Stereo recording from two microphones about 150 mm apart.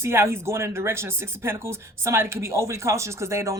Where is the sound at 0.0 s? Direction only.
15° right (ahead or behind).